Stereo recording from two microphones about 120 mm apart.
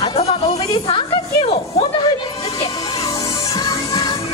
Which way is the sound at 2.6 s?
30° left (ahead or behind).